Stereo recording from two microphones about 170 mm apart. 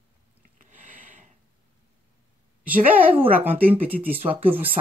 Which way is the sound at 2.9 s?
10° right (ahead or behind).